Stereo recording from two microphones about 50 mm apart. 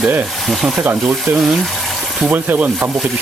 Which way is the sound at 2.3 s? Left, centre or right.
Right.